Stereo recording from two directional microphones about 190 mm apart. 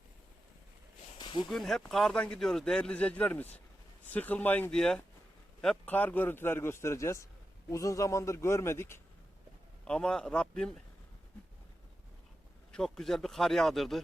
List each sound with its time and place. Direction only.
1.2 s a sound: 25° left (ahead or behind)
1.5 s a man's voice: centre (ahead or behind)
12.7 s speech: centre (ahead or behind)